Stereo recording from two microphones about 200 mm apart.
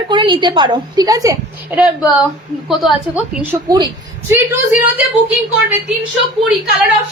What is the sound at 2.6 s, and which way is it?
A woman's voice, centre (ahead or behind).